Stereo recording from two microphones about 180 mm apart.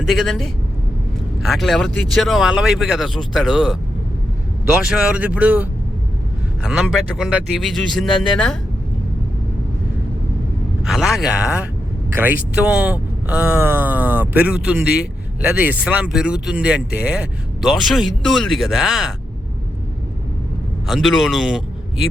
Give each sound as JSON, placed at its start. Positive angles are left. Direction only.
{"t": 0.1, "sound": "speech", "side_deg": 0}
{"t": 4.8, "sound": "speech", "side_deg": -5}
{"t": 10.8, "sound": "speech", "side_deg": 0}
{"t": 20.8, "sound": "speech", "side_deg": 0}